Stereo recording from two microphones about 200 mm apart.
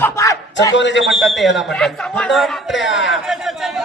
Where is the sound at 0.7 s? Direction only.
65° left (ahead or behind).